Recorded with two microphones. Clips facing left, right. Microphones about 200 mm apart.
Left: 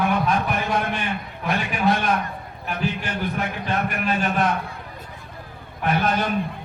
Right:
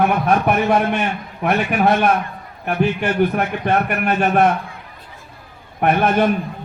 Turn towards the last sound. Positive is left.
turn(degrees=-55)  # may be behind; listen again after turning